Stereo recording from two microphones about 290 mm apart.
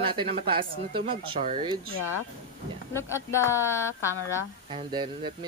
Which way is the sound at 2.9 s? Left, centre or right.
Centre.